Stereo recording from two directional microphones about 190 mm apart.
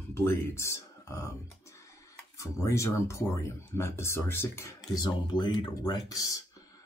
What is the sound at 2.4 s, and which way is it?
Speech, 15° left (ahead or behind).